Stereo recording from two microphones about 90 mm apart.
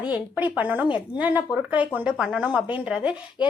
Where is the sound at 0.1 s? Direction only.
20° right (ahead or behind).